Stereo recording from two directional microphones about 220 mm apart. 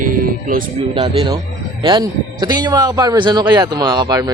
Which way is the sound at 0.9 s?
25° right (ahead or behind).